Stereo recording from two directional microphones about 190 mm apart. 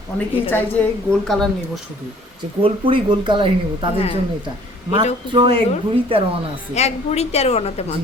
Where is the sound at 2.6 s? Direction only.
30° right (ahead or behind).